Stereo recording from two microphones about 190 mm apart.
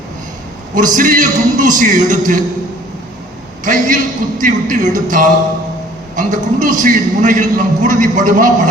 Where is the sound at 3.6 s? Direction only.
45° right (ahead or behind).